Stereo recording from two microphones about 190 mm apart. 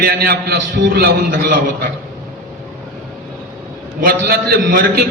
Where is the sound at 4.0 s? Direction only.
55° right (ahead or behind).